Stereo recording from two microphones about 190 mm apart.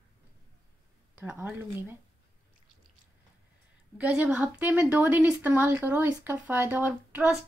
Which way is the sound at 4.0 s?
5° right (ahead or behind).